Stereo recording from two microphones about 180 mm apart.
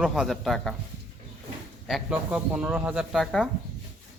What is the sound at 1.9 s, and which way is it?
Speech, 5° right (ahead or behind).